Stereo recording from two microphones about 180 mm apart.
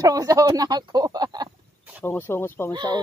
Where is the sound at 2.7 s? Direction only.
25° right (ahead or behind).